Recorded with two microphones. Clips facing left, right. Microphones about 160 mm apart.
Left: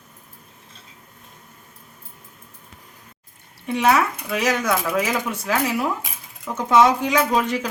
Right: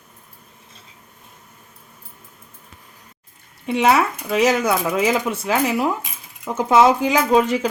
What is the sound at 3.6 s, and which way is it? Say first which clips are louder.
Speech: right 2 dB; 30° right (ahead or behind).